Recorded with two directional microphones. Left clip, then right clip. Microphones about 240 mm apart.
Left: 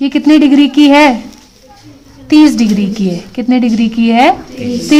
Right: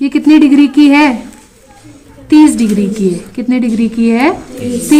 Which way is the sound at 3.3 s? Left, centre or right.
Left.